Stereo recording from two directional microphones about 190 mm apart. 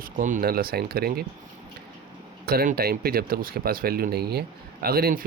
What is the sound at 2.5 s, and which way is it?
Speech, 55° right (ahead or behind).